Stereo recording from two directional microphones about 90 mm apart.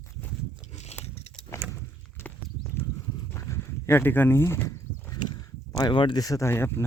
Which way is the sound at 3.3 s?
30° left (ahead or behind).